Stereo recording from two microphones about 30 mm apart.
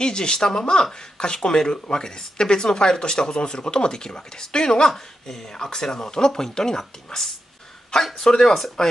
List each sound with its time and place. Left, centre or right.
0.0 s speech: left
4.9 s a woman's voice: centre